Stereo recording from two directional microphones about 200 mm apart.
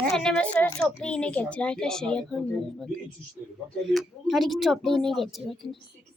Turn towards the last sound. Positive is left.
turn(degrees=0)  # may be behind; listen again after turning